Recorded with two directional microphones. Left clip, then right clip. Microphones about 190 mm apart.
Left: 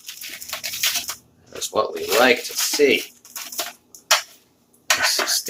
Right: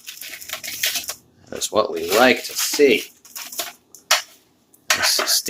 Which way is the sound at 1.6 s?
60° right (ahead or behind).